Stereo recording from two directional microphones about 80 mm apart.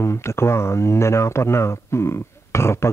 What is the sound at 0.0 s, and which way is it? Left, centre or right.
Speech, left.